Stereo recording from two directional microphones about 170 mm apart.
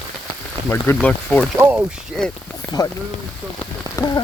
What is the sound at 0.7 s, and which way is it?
Speech, 10° left (ahead or behind).